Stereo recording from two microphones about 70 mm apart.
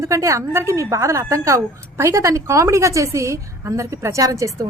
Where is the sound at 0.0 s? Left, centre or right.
Right.